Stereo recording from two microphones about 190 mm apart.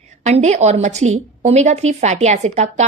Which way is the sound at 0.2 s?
35° right (ahead or behind).